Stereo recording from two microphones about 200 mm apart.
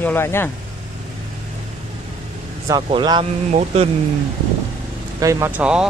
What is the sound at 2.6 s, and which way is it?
Speech, 20° right (ahead or behind).